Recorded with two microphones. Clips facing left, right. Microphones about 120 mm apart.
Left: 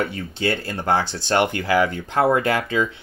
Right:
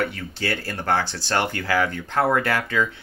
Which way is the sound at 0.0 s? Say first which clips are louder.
Left 3 dB; 20° left (ahead or behind).